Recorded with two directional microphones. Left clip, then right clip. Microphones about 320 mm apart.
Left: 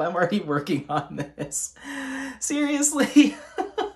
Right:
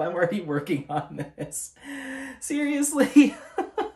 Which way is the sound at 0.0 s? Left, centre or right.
Centre.